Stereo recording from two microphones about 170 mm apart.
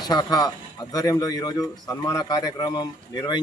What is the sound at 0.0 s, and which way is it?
Speech, 25° left (ahead or behind).